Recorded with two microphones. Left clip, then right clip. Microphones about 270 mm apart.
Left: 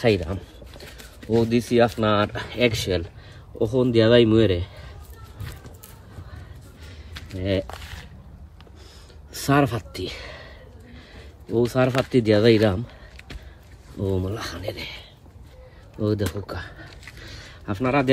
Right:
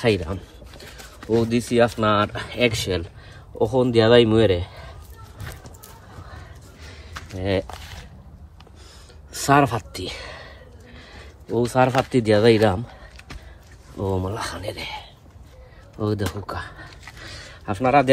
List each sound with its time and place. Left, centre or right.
0.0 s a sound: centre
1.5 s speech: centre
7.3 s speech: centre
9.3 s speech: centre
11.5 s speech: centre
14.2 s speech: centre
16.0 s a sound: centre